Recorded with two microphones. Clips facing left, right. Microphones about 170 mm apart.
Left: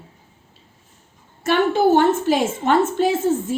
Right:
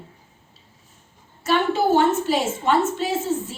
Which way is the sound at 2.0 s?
50° left (ahead or behind).